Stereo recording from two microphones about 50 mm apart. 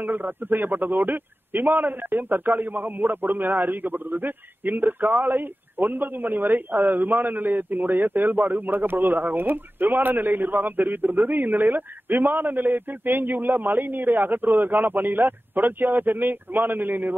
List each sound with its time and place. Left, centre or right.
0.0 s a man's voice: right